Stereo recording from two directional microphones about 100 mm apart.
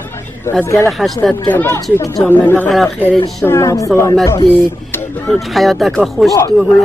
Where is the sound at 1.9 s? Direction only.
35° left (ahead or behind).